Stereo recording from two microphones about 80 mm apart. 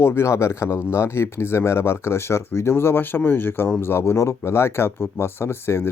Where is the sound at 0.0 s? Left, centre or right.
Left.